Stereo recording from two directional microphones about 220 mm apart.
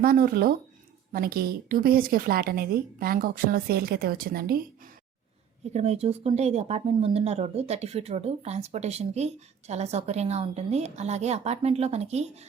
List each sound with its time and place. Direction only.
0.0 s a woman's voice: 40° right (ahead or behind)
5.7 s speech: 30° right (ahead or behind)